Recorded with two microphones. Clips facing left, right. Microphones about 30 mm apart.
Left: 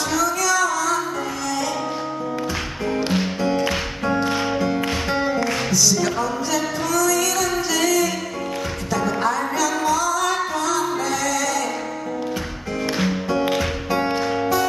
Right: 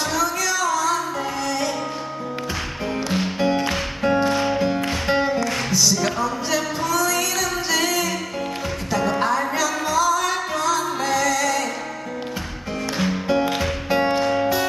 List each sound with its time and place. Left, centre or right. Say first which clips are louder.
0.1 s music: left 5 dB; centre
3.3 s music: even; centre
4.3 s music: right 1 dB; centre
4.6 s music: even; centre
12.9 s music: even; centre
13.8 s music: right 5 dB; centre